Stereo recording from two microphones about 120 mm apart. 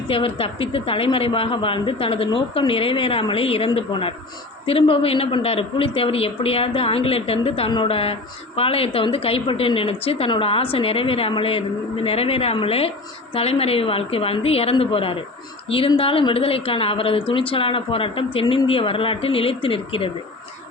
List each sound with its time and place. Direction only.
0.1 s a woman's voice: 50° left (ahead or behind)